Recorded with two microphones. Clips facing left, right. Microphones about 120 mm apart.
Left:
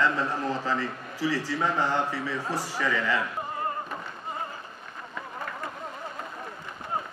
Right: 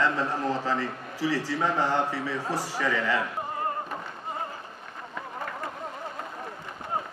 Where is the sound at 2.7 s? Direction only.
45° right (ahead or behind).